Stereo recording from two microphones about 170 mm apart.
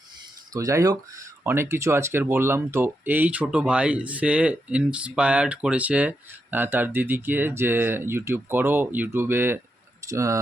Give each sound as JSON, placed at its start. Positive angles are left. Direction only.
{"t": 0.5, "sound": "speech", "side_deg": -20}